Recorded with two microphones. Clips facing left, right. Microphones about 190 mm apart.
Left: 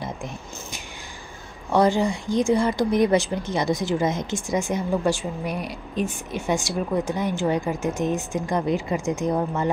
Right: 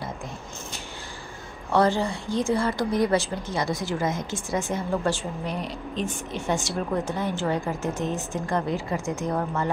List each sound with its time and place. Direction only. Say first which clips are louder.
1.7 s a woman's voice: left 3 dB; 15° left (ahead or behind)